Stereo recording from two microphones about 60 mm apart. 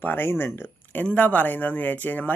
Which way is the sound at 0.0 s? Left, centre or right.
Left.